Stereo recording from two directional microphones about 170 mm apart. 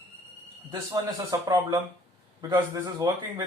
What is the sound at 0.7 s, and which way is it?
Speech, 20° right (ahead or behind).